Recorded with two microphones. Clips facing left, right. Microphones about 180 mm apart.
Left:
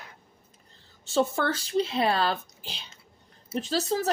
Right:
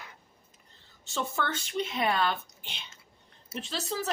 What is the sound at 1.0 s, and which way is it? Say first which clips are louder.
Speech: left 7 dB; 35° left (ahead or behind).